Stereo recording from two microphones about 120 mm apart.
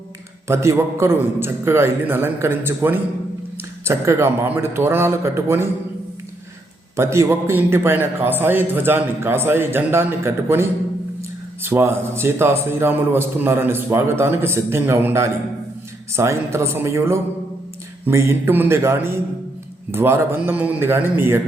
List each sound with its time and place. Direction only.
0.4 s speech: 25° right (ahead or behind)
6.9 s speech: 25° right (ahead or behind)